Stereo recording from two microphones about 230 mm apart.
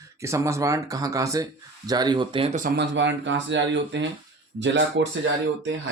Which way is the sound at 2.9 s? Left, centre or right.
Right.